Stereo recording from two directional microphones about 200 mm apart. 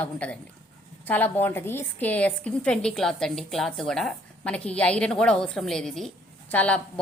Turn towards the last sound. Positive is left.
turn(degrees=5)  # may be behind; listen again after turning